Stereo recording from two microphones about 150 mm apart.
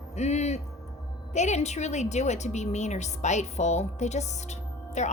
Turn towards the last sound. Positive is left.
turn(degrees=50)  # may be behind; listen again after turning